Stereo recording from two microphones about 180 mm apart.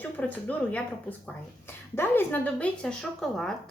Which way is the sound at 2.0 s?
10° left (ahead or behind).